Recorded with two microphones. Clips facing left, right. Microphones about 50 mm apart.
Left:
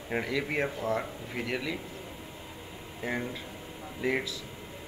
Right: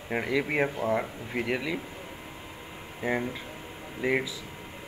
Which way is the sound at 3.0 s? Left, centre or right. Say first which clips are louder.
Right 4 dB; centre.